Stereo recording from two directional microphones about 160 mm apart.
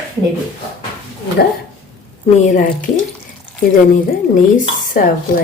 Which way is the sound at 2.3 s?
50° left (ahead or behind).